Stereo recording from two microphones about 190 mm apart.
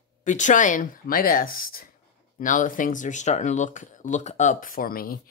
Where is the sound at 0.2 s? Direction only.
40° left (ahead or behind).